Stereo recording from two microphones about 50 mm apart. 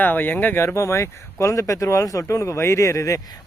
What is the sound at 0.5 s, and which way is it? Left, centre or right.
Speech, left.